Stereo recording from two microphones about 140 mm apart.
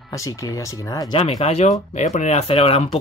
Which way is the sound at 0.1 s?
25° left (ahead or behind).